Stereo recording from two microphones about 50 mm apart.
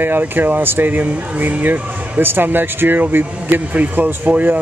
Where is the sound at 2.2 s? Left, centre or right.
Right.